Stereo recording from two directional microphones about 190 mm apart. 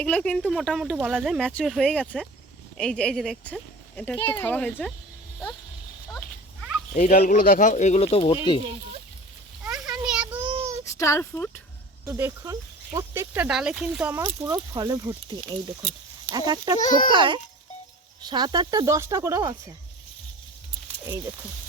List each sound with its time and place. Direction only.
0.0 s speech: 5° left (ahead or behind)
7.1 s speech: 50° left (ahead or behind); by 8.4 s 30° left (ahead or behind)
9.6 s a sound: 5° right (ahead or behind)
10.0 s child singing: 5° right (ahead or behind)
10.9 s speech: 15° left (ahead or behind)
12.0 s speech: 15° right (ahead or behind)
16.8 s speech: 45° left (ahead or behind)
17.1 s speech: 25° right (ahead or behind)